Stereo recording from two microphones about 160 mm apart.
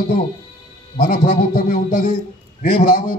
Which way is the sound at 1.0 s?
55° left (ahead or behind).